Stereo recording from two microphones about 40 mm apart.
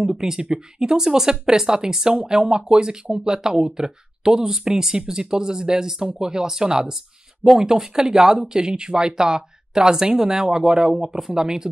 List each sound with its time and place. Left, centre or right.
0.0 s speech: centre